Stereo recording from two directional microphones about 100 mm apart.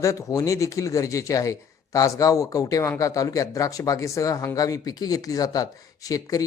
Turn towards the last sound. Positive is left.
turn(degrees=35)  # may be behind; listen again after turning